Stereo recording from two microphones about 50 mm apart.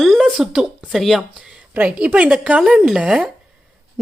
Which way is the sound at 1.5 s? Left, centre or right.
Right.